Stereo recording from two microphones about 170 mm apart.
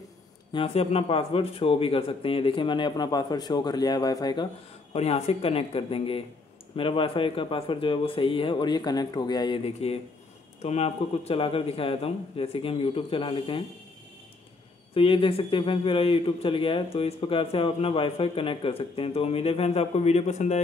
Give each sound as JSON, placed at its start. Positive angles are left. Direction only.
{"t": 0.5, "sound": "speech", "side_deg": 35}
{"t": 4.9, "sound": "a man's voice", "side_deg": 40}
{"t": 9.8, "sound": "a man's voice", "side_deg": 35}
{"t": 15.0, "sound": "a man's voice", "side_deg": 30}